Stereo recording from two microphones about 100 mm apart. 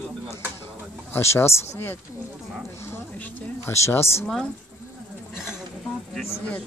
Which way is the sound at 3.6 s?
30° left (ahead or behind).